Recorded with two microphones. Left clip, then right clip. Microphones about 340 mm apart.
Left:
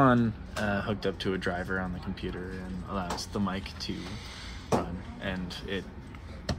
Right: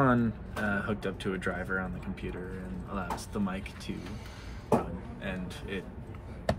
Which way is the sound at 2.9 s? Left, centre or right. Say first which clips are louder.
Left 2 dB; left.